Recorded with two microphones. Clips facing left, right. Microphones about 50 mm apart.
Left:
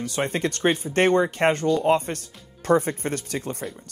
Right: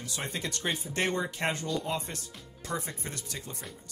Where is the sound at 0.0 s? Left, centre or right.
Left.